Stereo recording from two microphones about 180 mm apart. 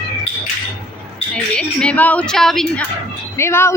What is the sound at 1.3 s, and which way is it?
Speech, 5° left (ahead or behind).